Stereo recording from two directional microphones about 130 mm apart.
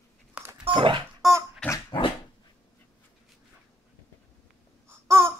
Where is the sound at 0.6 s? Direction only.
40° right (ahead or behind).